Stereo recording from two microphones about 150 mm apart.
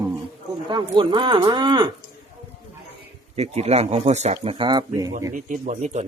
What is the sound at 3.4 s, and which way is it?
Speech, 45° right (ahead or behind).